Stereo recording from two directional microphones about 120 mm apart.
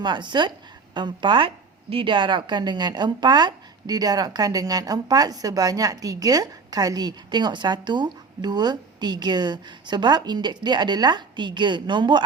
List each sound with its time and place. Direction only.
0.0 s a woman's voice: 40° right (ahead or behind)